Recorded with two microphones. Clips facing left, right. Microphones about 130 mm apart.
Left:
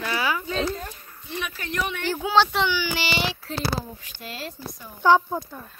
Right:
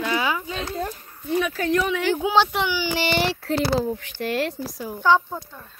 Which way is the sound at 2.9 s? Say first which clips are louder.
Right 5 dB; 50° right (ahead or behind).